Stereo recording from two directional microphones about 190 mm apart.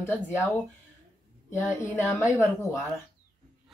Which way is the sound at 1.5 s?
15° left (ahead or behind).